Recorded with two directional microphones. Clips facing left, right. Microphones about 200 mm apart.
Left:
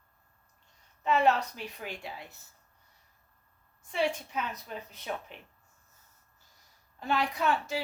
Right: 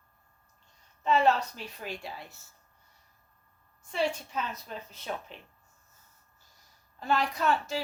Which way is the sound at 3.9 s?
15° left (ahead or behind).